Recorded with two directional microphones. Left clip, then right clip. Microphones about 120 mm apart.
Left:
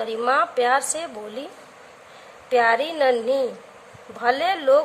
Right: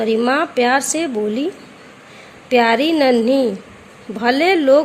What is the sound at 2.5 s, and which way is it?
Speech, 40° right (ahead or behind).